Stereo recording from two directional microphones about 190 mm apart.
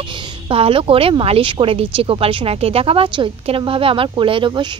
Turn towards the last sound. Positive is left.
turn(degrees=-25)  # may be behind; listen again after turning